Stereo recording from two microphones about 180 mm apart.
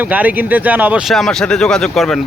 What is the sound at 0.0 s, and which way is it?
A man's voice, 10° right (ahead or behind).